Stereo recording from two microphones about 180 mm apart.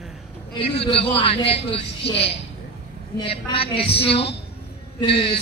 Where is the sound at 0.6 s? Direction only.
30° left (ahead or behind).